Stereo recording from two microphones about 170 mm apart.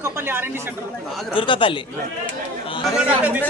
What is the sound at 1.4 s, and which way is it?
Speech, 30° left (ahead or behind).